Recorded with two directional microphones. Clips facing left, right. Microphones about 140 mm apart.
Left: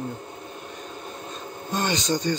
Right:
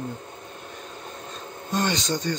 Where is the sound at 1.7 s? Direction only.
Centre (ahead or behind).